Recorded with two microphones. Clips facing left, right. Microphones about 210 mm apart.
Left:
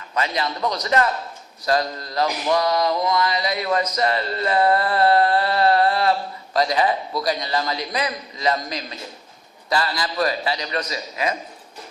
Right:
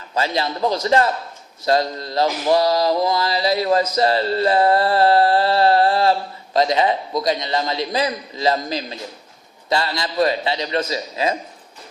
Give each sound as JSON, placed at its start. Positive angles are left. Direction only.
{"t": 0.1, "sound": "a man's voice", "side_deg": -30}
{"t": 1.6, "sound": "mantra", "side_deg": -25}
{"t": 9.6, "sound": "a man's voice", "side_deg": -25}